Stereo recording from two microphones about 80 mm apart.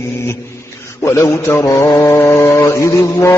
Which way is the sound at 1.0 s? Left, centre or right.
Left.